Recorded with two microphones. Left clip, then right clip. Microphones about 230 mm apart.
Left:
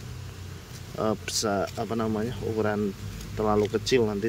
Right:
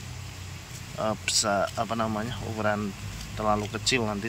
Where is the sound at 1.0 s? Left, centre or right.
Centre.